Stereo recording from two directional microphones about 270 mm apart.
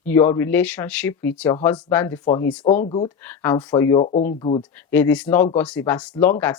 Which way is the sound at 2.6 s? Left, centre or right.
Left.